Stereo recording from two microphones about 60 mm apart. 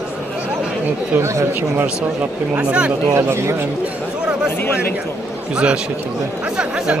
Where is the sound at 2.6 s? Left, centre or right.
Centre.